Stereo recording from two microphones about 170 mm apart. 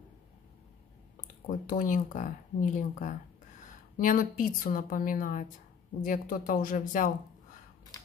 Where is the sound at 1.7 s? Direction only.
50° left (ahead or behind).